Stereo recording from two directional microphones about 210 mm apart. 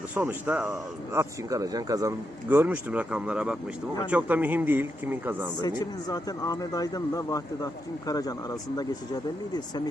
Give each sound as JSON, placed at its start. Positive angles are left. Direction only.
{"t": 0.1, "sound": "speech", "side_deg": -10}
{"t": 5.6, "sound": "speech", "side_deg": 20}